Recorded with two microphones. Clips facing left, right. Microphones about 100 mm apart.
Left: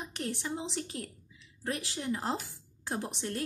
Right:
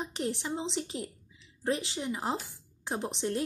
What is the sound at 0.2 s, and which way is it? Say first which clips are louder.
A woman's voice: right 2 dB; 25° right (ahead or behind).